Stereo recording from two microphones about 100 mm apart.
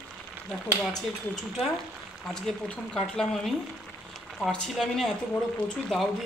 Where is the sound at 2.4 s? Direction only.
10° left (ahead or behind).